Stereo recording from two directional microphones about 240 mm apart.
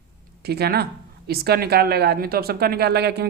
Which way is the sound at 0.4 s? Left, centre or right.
Right.